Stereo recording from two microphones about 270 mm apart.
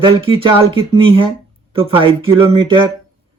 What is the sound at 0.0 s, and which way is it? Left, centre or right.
Speech, centre.